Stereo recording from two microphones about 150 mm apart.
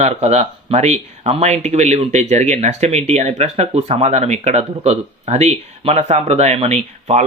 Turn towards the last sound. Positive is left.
turn(degrees=-45)  # may be behind; listen again after turning